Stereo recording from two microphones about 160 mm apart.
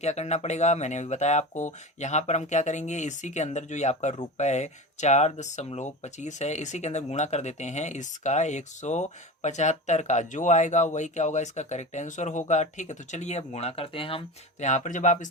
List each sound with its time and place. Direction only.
0.0 s speech: 45° left (ahead or behind)
14.6 s speech: 50° left (ahead or behind)